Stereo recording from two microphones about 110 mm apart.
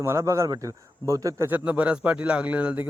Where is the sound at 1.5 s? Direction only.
10° right (ahead or behind).